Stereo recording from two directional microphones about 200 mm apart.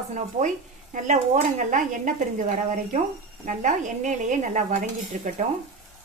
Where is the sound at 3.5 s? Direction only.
40° right (ahead or behind).